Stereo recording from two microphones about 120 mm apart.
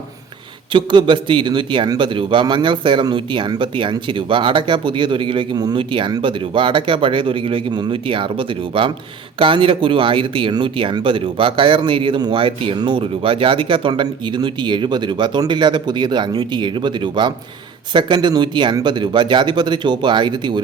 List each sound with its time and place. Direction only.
0.7 s a man's voice: 40° right (ahead or behind)